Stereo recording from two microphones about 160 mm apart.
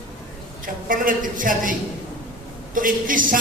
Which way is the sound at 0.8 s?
60° right (ahead or behind).